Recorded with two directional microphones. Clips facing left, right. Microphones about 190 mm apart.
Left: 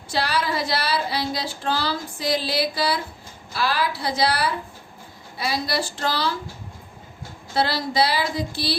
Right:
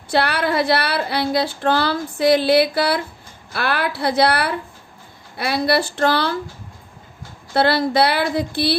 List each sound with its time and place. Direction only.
0.1 s child singing: 60° right (ahead or behind)
7.5 s child singing: 60° right (ahead or behind)